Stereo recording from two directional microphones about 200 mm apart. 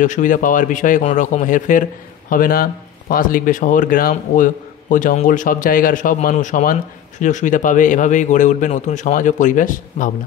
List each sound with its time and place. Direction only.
0.0 s a man's voice: 40° left (ahead or behind)